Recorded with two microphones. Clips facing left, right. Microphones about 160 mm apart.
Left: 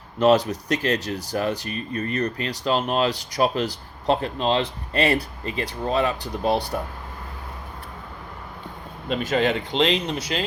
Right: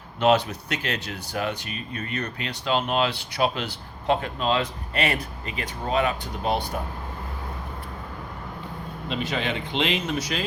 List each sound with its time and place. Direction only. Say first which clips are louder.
0.2 s speech: left 3 dB; 40° left (ahead or behind)
9.0 s speech: left 6 dB; 45° left (ahead or behind); by 10.4 s 30° left (ahead or behind)